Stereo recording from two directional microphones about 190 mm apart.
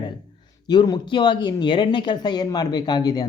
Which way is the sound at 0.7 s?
25° left (ahead or behind).